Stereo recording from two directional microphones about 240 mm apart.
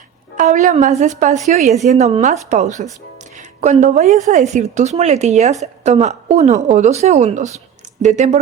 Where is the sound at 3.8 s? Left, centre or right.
Right.